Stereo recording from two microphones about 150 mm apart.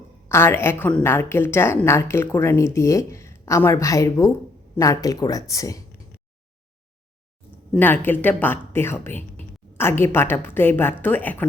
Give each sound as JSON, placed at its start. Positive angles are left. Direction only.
{"t": 0.3, "sound": "a woman's voice", "side_deg": 15}
{"t": 7.7, "sound": "a woman's voice", "side_deg": 15}